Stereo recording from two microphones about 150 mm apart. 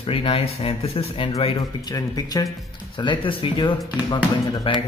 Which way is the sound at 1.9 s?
25° left (ahead or behind).